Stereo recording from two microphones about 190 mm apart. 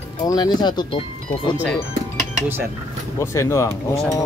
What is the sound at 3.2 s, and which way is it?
Speech, 15° left (ahead or behind).